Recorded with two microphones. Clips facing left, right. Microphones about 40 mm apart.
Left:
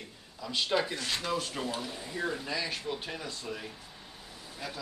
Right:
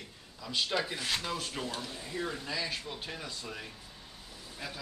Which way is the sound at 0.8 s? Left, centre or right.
Centre.